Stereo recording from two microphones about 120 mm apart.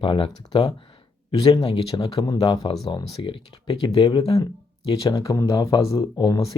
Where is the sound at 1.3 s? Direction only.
35° left (ahead or behind).